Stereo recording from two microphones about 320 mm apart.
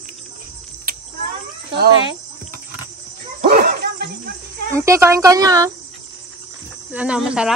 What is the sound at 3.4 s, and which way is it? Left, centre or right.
Dog, right.